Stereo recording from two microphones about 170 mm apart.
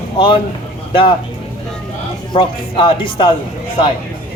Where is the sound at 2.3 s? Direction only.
30° left (ahead or behind).